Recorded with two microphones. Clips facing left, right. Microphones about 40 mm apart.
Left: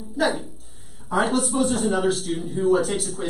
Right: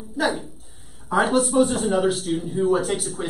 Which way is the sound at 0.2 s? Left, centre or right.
Centre.